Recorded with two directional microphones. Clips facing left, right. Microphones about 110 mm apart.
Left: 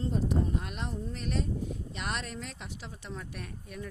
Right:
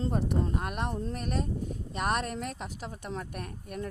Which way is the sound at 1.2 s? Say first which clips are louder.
Right 1 dB; 45° right (ahead or behind).